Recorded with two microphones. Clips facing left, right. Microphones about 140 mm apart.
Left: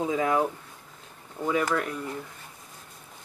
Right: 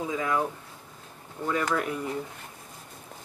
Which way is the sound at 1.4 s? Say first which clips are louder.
Left 2 dB; 10° left (ahead or behind).